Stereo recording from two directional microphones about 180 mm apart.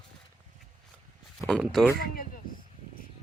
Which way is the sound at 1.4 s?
Centre (ahead or behind).